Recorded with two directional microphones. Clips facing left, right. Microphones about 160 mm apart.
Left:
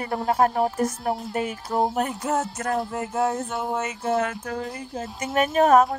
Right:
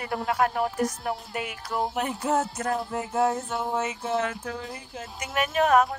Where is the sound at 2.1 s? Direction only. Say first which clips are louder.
Even; centre (ahead or behind).